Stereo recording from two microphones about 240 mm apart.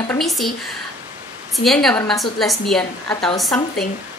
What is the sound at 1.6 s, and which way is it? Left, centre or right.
A woman's voice, centre.